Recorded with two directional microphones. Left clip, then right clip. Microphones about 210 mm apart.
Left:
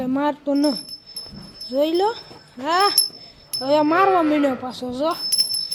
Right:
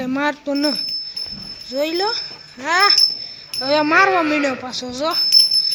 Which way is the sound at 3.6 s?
10° left (ahead or behind).